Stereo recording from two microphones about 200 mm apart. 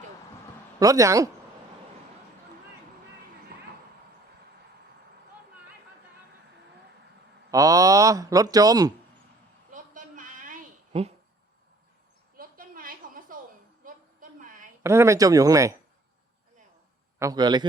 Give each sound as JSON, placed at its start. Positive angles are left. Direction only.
{"t": 0.8, "sound": "speech", "side_deg": -15}
{"t": 7.5, "sound": "speech", "side_deg": -15}
{"t": 9.7, "sound": "a sound", "side_deg": -40}
{"t": 12.4, "sound": "a sound", "side_deg": -45}
{"t": 14.8, "sound": "speech", "side_deg": -15}
{"t": 17.2, "sound": "a man's voice", "side_deg": -20}